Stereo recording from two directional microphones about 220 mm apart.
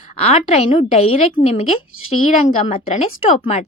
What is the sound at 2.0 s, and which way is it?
Speech, 75° left (ahead or behind).